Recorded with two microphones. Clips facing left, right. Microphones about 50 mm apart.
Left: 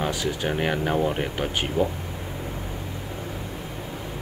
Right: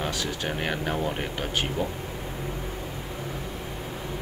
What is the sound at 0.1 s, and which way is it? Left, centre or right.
Speech, centre.